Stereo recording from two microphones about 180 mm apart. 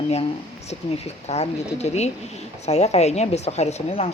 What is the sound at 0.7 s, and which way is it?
Speech, 35° left (ahead or behind).